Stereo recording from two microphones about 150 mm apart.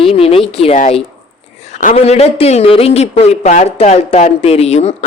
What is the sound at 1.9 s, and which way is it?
Speech, 45° left (ahead or behind).